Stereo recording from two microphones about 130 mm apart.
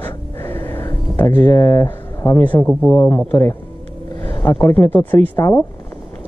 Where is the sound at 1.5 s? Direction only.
30° left (ahead or behind).